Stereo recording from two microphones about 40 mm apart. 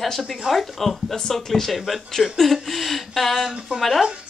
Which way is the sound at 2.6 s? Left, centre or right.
Centre.